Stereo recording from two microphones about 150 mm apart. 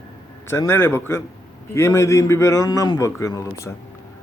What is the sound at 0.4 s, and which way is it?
A man's voice, 15° left (ahead or behind).